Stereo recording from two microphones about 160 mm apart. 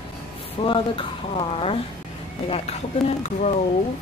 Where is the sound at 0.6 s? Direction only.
30° left (ahead or behind).